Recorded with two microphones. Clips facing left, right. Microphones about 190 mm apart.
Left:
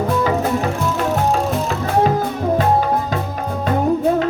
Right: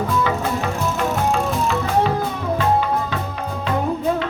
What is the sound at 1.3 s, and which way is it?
Music, 40° left (ahead or behind).